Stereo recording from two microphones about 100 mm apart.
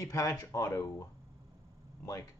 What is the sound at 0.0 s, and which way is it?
A man's voice, 30° left (ahead or behind).